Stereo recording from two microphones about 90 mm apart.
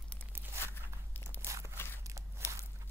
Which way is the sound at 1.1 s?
20° left (ahead or behind).